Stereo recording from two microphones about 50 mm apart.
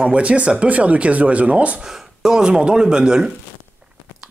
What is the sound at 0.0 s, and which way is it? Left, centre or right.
Speech, right.